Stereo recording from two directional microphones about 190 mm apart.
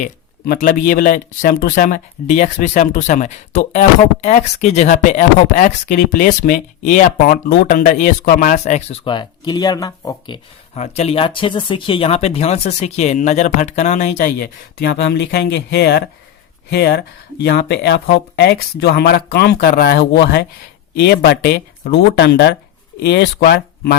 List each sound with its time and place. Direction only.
0.0 s speech: 50° left (ahead or behind); by 10.4 s 20° left (ahead or behind)
10.8 s speech: 35° left (ahead or behind); by 24.0 s 55° left (ahead or behind)